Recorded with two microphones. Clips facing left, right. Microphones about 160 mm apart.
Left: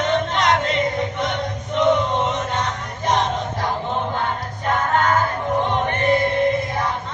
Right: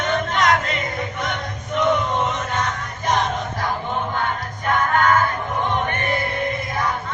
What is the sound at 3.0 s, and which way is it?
Music, 30° left (ahead or behind).